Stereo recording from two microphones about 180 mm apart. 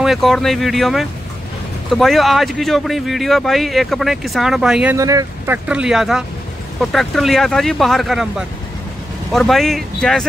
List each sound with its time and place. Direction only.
0.0 s speech: centre (ahead or behind)
4.9 s speech: 20° right (ahead or behind)
5.7 s speech: 5° right (ahead or behind)